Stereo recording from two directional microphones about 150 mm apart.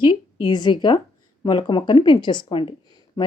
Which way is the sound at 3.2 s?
30° left (ahead or behind).